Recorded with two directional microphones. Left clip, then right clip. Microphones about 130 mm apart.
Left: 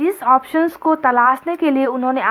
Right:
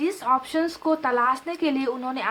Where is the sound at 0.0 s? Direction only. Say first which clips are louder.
Left 8 dB; 35° left (ahead or behind).